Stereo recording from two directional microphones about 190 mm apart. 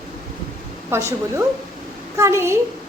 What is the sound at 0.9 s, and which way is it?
A woman's voice, 15° right (ahead or behind).